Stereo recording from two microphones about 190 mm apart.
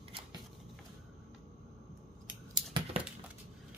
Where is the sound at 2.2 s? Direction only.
5° right (ahead or behind).